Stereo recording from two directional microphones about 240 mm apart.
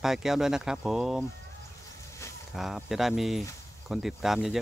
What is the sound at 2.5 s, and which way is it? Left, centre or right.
Speech, centre.